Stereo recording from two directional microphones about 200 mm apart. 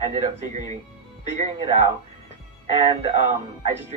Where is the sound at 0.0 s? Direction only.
35° right (ahead or behind).